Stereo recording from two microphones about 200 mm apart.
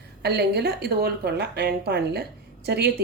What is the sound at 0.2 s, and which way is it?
A woman's voice, 55° right (ahead or behind).